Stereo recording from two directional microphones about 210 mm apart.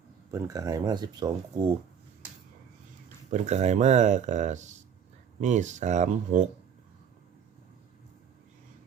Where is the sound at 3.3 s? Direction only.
30° right (ahead or behind).